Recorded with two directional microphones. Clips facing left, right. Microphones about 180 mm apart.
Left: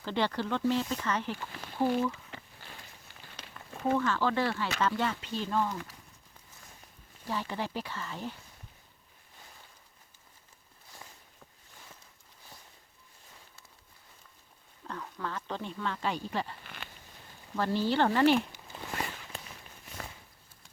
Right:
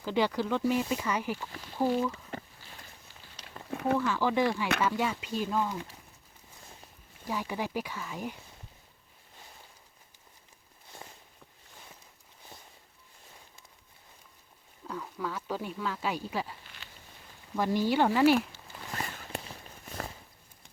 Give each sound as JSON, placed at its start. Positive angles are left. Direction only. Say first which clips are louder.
{"t": 0.0, "sound": "speech", "louder": "right 3 dB", "side_deg": -10}
{"t": 3.9, "sound": "speech", "louder": "right 1 dB", "side_deg": -10}
{"t": 7.3, "sound": "speech", "louder": "right 1 dB", "side_deg": -10}
{"t": 14.8, "sound": "speech", "louder": "right 2 dB", "side_deg": -5}
{"t": 16.6, "sound": "a sound", "louder": "left 6 dB", "side_deg": 60}
{"t": 17.6, "sound": "speech", "louder": "right 1 dB", "side_deg": -15}
{"t": 18.7, "sound": "a sound", "louder": "left 3 dB", "side_deg": 25}
{"t": 19.8, "sound": "walk", "louder": "right 5 dB", "side_deg": -45}